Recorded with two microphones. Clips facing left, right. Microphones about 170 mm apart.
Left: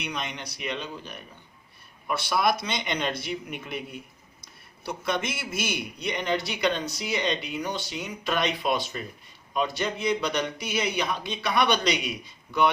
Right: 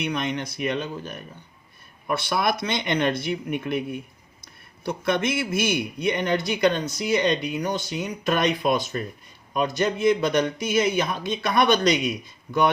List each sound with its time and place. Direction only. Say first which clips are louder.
0.0 s a man's voice: right 7 dB; 55° right (ahead or behind)
4.9 s a man's voice: right 5 dB; 55° right (ahead or behind)